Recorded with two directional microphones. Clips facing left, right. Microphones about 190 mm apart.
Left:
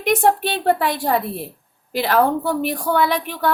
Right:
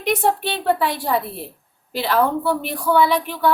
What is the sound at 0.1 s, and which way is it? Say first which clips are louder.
A woman's voice: left 3 dB; 45° left (ahead or behind).